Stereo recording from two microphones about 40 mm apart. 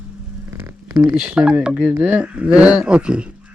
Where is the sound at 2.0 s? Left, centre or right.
Right.